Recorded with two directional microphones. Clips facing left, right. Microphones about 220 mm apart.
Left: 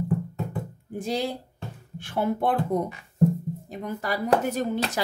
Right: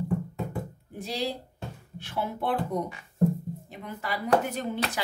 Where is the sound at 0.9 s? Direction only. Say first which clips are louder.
Left 4 dB; 50° left (ahead or behind).